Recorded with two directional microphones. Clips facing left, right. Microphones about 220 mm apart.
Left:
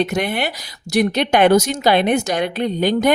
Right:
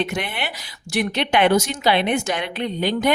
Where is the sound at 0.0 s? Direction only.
40° left (ahead or behind).